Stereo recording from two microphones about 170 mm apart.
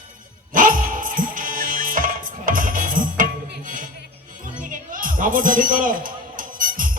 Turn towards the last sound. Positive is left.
turn(degrees=-55)  # may be behind; listen again after turning